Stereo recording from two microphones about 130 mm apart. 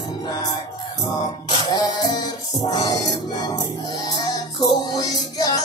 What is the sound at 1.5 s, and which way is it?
Music, 40° left (ahead or behind).